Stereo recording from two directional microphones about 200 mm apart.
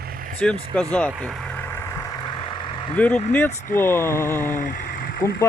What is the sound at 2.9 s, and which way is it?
Speech, 10° left (ahead or behind).